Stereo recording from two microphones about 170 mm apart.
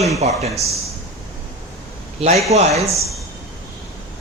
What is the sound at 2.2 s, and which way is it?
Speech, 35° right (ahead or behind).